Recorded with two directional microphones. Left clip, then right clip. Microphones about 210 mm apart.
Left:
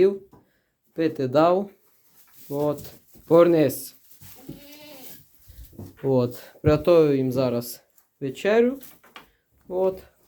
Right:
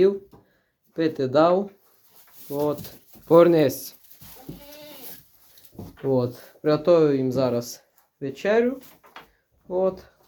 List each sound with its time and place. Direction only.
0.9 s speech: 5° left (ahead or behind)
6.1 s speech: 20° left (ahead or behind)